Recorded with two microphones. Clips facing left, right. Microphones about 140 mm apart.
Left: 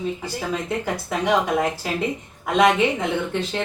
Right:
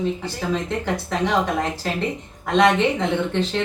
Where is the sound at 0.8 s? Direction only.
5° left (ahead or behind).